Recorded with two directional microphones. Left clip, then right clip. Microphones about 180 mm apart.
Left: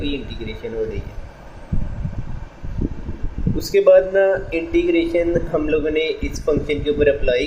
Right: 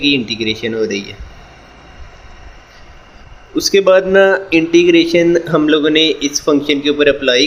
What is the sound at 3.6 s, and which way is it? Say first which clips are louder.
Speech: right 3 dB; 40° right (ahead or behind).